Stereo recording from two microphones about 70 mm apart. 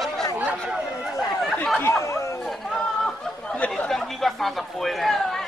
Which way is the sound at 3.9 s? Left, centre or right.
Centre.